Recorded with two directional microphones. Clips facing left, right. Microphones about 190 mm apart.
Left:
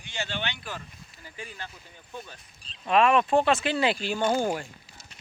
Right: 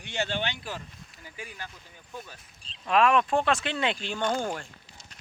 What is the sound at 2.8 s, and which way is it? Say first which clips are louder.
Speech: left 1 dB; centre (ahead or behind).